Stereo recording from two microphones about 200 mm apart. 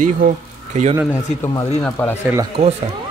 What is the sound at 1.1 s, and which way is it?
Speech, 15° left (ahead or behind).